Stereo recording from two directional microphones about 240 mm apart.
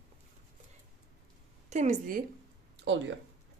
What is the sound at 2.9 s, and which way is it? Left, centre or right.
Speech, right.